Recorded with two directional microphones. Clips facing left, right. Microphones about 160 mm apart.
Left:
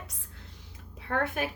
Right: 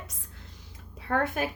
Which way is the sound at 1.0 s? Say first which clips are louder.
Right 2 dB; 40° right (ahead or behind).